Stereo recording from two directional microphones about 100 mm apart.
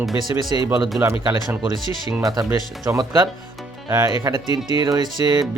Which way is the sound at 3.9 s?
25° right (ahead or behind).